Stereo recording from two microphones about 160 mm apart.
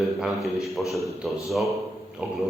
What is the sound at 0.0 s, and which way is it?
A man's voice, centre (ahead or behind).